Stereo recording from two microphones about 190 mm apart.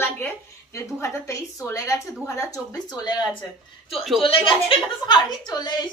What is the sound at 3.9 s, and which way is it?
Speech, centre (ahead or behind).